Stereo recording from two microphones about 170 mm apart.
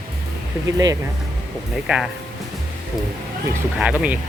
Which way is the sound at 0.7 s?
20° right (ahead or behind).